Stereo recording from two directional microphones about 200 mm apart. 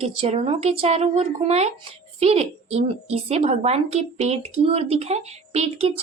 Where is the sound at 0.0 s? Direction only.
30° right (ahead or behind).